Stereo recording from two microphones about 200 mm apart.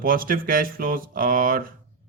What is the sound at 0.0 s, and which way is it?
Speech, 45° right (ahead or behind).